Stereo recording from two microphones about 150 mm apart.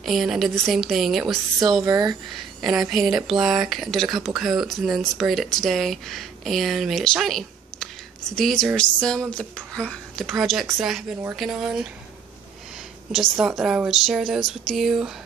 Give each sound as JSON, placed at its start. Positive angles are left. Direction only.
{"t": 0.0, "sound": "speech", "side_deg": 0}
{"t": 1.8, "sound": "speech", "side_deg": -25}
{"t": 2.8, "sound": "speech", "side_deg": 0}
{"t": 13.1, "sound": "speech", "side_deg": -5}